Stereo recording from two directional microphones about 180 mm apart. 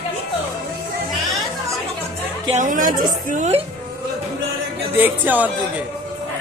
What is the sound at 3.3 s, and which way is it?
Speech, 40° right (ahead or behind).